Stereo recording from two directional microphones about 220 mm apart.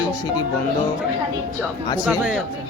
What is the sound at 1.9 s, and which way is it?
Speech, 5° right (ahead or behind).